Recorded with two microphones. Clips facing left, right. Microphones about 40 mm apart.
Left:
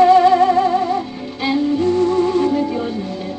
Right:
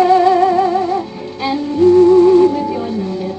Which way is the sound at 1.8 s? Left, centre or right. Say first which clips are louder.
Right 13 dB; centre.